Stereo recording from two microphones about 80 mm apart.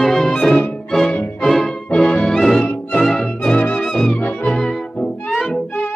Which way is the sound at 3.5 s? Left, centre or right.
Centre.